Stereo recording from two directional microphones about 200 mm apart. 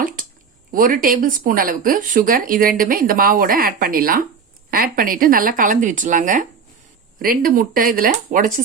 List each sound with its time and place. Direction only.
0.7 s speech: 45° right (ahead or behind)